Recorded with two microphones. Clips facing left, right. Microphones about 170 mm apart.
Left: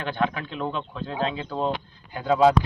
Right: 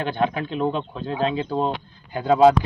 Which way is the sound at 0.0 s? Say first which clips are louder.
Right 3 dB; 40° right (ahead or behind).